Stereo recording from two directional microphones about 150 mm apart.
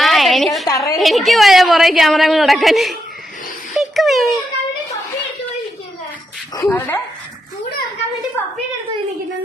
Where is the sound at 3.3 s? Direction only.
60° left (ahead or behind).